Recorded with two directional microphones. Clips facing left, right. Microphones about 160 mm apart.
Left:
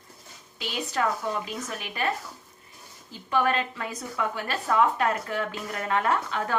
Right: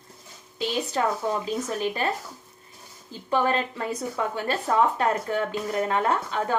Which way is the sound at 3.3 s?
30° right (ahead or behind).